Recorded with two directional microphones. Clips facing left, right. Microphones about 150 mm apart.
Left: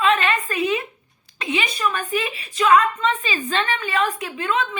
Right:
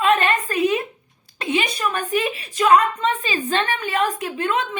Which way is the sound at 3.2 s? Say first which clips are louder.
Right 2 dB; 45° right (ahead or behind).